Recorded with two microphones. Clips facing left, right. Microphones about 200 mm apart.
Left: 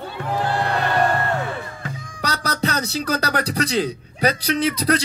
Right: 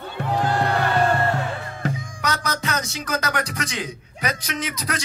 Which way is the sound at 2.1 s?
35° left (ahead or behind).